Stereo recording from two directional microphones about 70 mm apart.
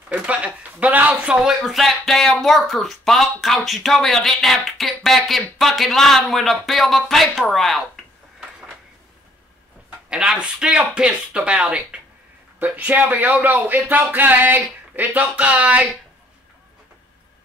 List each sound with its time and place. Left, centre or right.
0.1 s a sound: centre
1.1 s speech: centre
9.8 s speech: centre
12.5 s speech: right